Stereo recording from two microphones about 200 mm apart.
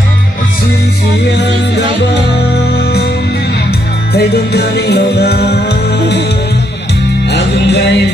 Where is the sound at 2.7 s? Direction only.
55° left (ahead or behind).